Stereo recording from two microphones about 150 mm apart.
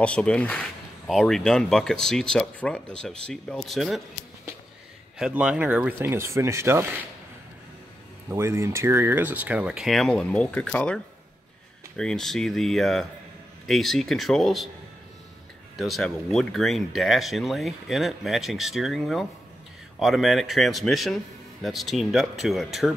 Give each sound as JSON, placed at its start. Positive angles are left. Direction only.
{"t": 0.0, "sound": "speech", "side_deg": 10}
{"t": 5.2, "sound": "speech", "side_deg": -10}
{"t": 8.3, "sound": "speech", "side_deg": -20}
{"t": 12.0, "sound": "speech", "side_deg": 5}
{"t": 15.8, "sound": "speech", "side_deg": 0}